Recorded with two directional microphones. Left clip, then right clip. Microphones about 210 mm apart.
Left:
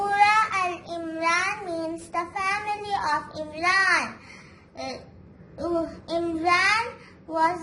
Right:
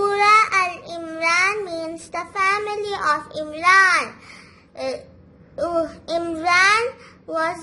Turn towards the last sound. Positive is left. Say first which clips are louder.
# even
turn(degrees=-55)  # may be behind; listen again after turning